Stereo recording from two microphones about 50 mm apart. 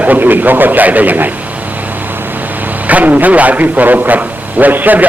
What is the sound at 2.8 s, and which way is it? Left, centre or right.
A man's voice, right.